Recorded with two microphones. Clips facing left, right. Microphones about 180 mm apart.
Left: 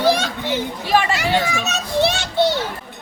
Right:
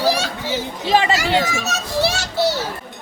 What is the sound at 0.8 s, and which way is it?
Speech, 20° right (ahead or behind).